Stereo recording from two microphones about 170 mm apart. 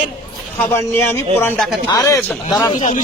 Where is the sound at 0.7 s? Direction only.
15° left (ahead or behind).